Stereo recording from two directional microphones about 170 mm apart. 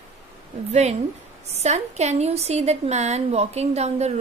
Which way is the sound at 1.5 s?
40° right (ahead or behind).